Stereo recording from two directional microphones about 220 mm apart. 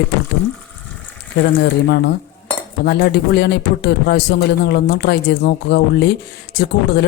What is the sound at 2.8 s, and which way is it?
A man's voice, 50° left (ahead or behind).